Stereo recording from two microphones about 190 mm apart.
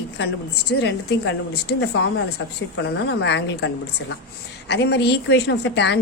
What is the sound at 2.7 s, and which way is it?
Speech, 65° left (ahead or behind).